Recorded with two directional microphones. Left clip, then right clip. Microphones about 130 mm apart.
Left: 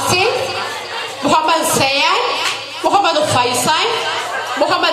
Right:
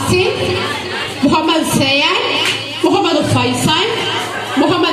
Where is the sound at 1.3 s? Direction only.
25° left (ahead or behind).